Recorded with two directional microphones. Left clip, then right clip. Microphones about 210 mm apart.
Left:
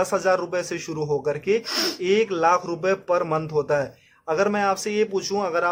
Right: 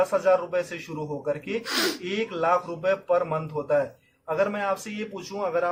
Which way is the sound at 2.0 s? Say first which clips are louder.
Left 9 dB; 45° left (ahead or behind).